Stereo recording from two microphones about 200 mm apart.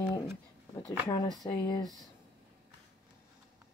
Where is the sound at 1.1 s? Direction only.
20° left (ahead or behind).